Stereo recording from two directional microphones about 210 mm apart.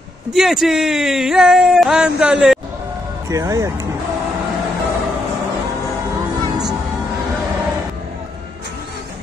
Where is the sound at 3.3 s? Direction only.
15° right (ahead or behind).